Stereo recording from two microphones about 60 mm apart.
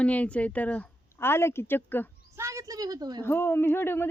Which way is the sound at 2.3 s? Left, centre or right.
Right.